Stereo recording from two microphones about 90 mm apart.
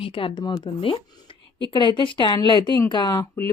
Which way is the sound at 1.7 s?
60° left (ahead or behind).